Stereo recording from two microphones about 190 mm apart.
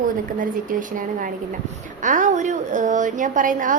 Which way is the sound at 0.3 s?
45° right (ahead or behind).